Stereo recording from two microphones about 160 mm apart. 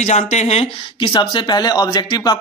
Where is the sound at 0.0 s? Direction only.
45° left (ahead or behind).